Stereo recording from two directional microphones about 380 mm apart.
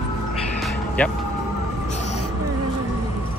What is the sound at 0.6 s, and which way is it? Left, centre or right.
Music, centre.